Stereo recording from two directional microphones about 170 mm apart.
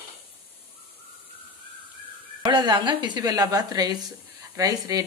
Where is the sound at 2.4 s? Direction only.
25° right (ahead or behind).